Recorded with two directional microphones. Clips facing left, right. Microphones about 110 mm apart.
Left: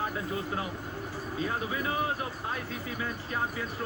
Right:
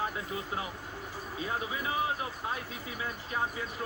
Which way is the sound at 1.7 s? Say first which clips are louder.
Left 2 dB; 20° right (ahead or behind).